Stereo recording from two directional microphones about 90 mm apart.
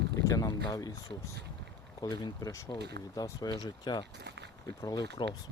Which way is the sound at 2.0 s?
50° left (ahead or behind).